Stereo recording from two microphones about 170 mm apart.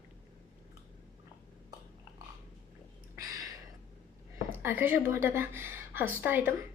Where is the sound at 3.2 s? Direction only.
20° right (ahead or behind).